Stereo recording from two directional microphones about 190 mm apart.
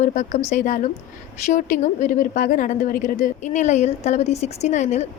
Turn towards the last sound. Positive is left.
turn(degrees=35)  # may be behind; listen again after turning